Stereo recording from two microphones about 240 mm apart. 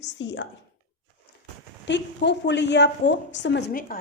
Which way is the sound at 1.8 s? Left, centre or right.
Left.